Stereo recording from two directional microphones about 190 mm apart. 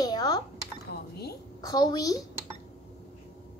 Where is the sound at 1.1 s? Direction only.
55° left (ahead or behind).